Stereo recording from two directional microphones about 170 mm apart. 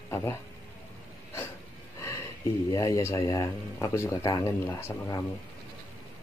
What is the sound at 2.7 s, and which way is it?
Speech, 20° left (ahead or behind).